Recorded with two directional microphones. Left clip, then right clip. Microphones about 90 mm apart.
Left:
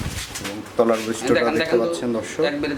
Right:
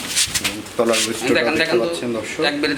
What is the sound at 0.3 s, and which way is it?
Pigeon, 30° right (ahead or behind).